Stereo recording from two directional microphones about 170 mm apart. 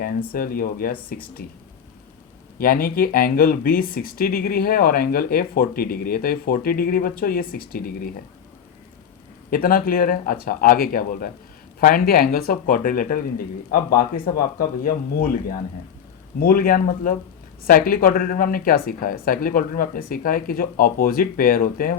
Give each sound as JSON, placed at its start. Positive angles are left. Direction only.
{"t": 0.3, "sound": "speech", "side_deg": 60}
{"t": 2.6, "sound": "speech", "side_deg": 60}
{"t": 9.5, "sound": "speech", "side_deg": 55}